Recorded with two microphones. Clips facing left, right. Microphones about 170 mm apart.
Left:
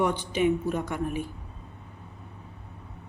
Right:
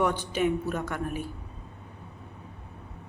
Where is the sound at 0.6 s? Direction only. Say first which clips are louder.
Left 2 dB; 10° left (ahead or behind).